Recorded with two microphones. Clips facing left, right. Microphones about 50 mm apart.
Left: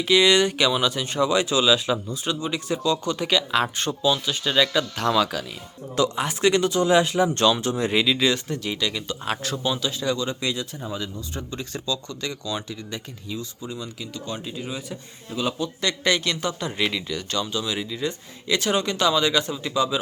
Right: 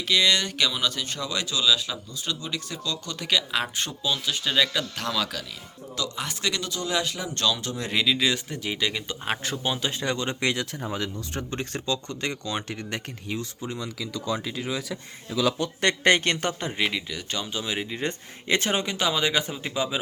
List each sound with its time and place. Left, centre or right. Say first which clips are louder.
0.0 s speech: left 5 dB; centre
6.0 s speech: left 9 dB; left
7.8 s speech: left 3 dB; centre; by 9.7 s right
9.8 s speech: left 2 dB; right
12.6 s speech: right 1 dB; right
14.4 s a man's voice: right 2 dB; right
15.8 s speech: right 3 dB; right
16.7 s speech: left 2 dB; centre; by 18.8 s right
18.8 s speech: left 4 dB; centre